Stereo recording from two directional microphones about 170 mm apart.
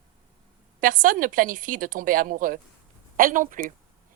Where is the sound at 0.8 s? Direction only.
55° right (ahead or behind).